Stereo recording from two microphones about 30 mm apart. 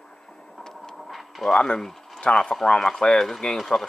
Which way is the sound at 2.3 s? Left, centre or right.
Left.